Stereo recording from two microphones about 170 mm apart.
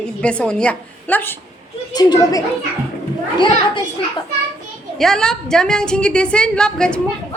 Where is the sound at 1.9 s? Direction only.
25° left (ahead or behind).